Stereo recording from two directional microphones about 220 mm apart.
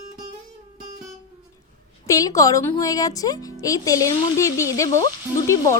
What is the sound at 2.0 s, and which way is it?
Speech, 15° left (ahead or behind).